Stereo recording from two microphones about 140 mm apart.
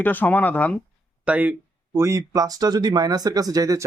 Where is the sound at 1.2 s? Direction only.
10° right (ahead or behind).